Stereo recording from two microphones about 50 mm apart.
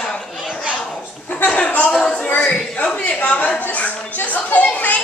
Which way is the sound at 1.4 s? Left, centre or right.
Left.